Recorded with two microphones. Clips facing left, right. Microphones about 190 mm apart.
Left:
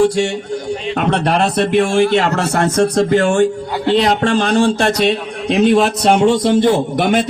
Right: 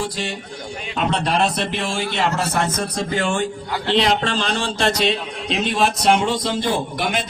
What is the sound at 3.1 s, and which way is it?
A man's voice, 50° left (ahead or behind).